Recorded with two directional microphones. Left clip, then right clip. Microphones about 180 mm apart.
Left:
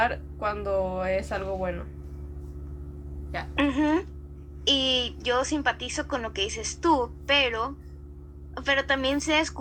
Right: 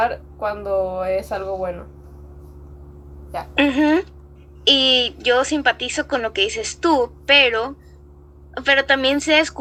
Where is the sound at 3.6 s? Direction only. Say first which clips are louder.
Right 8 dB; 40° right (ahead or behind).